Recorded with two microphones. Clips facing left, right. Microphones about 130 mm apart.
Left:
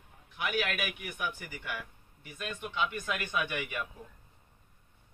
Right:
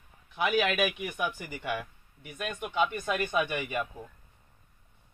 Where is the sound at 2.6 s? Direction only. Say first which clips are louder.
Right 5 dB; 45° right (ahead or behind).